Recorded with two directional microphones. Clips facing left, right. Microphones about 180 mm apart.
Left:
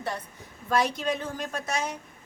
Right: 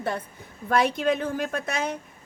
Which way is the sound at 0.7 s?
55° right (ahead or behind).